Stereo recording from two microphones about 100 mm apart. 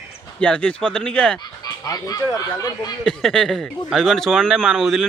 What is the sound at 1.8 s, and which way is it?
Speech, 35° left (ahead or behind).